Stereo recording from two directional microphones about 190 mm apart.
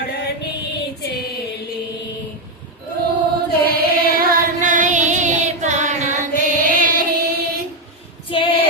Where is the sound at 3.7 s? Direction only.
50° right (ahead or behind).